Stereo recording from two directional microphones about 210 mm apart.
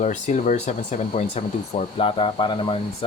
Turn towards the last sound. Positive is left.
turn(degrees=25)  # may be behind; listen again after turning